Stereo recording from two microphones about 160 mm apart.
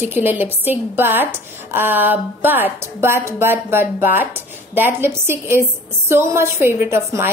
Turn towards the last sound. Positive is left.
turn(degrees=-15)  # may be behind; listen again after turning